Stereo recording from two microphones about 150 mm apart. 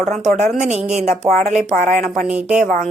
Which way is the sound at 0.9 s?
50° right (ahead or behind).